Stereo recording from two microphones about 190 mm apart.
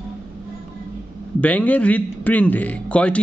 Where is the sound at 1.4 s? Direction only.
10° left (ahead or behind).